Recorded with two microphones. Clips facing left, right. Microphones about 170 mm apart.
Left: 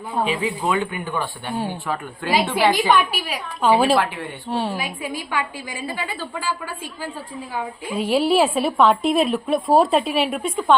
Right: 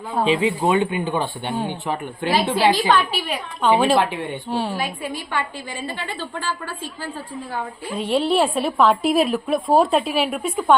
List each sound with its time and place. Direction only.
0.2 s a woman's voice: 20° right (ahead or behind)
2.7 s a woman's voice: 10° left (ahead or behind)
3.9 s speech: 20° right (ahead or behind)
4.4 s a woman's voice: centre (ahead or behind)
4.8 s a woman's voice: 10° left (ahead or behind)
7.5 s a woman's voice: 5° left (ahead or behind)